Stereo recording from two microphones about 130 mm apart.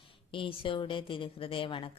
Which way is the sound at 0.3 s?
40° left (ahead or behind).